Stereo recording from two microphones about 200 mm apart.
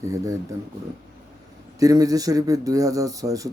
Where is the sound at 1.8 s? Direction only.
15° right (ahead or behind).